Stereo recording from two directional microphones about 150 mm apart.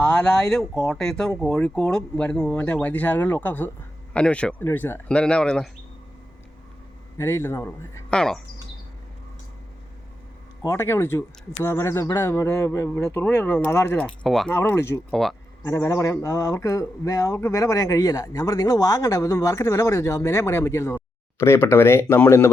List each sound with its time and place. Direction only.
0.0 s speech: 5° left (ahead or behind)
7.2 s speech: 20° left (ahead or behind)
8.1 s speech: 5° left (ahead or behind)
10.6 s speech: 20° left (ahead or behind)
14.3 s speech: centre (ahead or behind)
14.5 s speech: 15° left (ahead or behind)
15.1 s speech: centre (ahead or behind)
15.6 s speech: 20° left (ahead or behind)